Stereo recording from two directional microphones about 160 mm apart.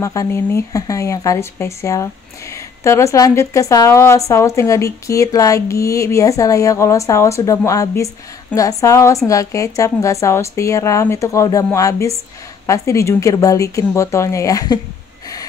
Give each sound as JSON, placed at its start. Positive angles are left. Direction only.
{"t": 0.0, "sound": "a woman's voice", "side_deg": 20}